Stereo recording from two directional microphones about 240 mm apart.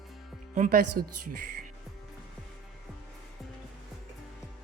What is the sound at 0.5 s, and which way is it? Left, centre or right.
Speech, right.